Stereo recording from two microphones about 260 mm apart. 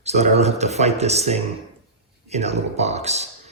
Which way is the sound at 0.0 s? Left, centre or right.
Right.